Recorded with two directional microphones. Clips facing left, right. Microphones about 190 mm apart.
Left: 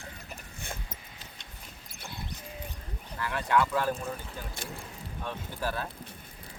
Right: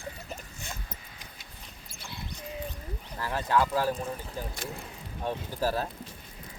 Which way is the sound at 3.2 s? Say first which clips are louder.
Even; 35° right (ahead or behind).